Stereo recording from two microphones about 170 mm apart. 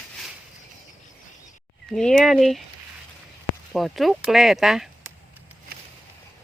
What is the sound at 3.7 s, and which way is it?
Speech, centre (ahead or behind).